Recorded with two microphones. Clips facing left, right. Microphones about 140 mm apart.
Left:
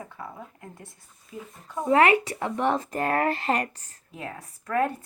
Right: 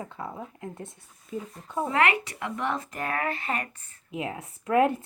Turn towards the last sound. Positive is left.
turn(degrees=-15)  # may be behind; listen again after turning